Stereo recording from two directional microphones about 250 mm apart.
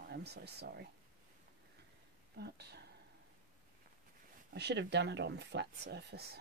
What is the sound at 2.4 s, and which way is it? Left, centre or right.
Speech, right.